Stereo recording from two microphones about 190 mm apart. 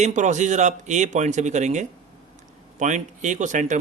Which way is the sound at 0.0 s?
40° right (ahead or behind).